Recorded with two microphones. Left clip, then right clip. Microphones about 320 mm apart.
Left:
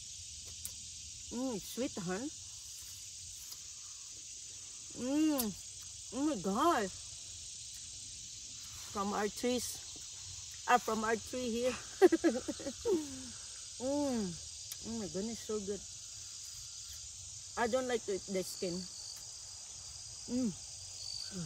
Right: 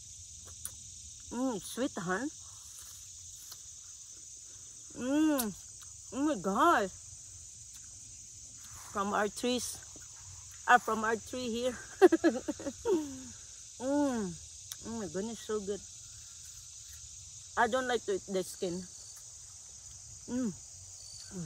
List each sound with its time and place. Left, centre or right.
1.3 s speech: centre
5.0 s speech: centre
8.9 s speech: centre
17.6 s speech: centre